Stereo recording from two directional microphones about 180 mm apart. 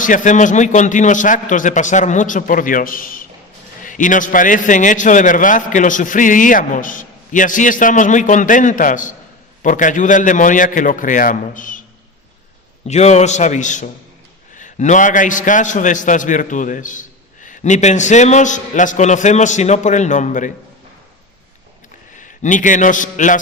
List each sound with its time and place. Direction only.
0.0 s a man's voice: 45° left (ahead or behind)
12.9 s a man's voice: 40° left (ahead or behind)
22.2 s a man's voice: 45° left (ahead or behind)